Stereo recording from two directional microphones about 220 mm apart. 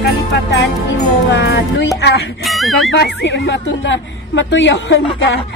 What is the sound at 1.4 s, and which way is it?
Music, 45° left (ahead or behind).